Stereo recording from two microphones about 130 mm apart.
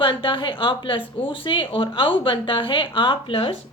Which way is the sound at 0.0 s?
40° left (ahead or behind).